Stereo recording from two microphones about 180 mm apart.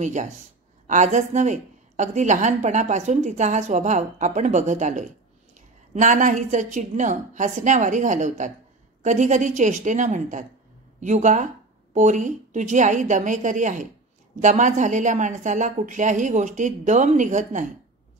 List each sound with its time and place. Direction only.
0.0 s a woman's voice: 40° right (ahead or behind)